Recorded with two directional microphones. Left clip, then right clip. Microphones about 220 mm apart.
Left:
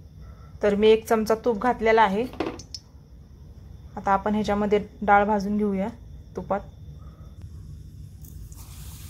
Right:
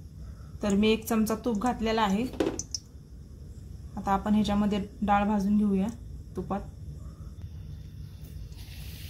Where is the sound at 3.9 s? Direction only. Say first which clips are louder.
Left 5 dB; 20° left (ahead or behind).